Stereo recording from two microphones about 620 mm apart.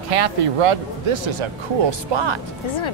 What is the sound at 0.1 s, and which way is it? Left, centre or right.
Speech, right.